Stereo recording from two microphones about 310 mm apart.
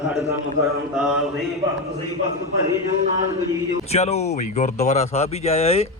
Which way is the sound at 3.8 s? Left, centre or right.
Left.